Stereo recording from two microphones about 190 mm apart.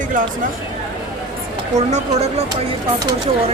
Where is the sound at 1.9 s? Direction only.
35° right (ahead or behind).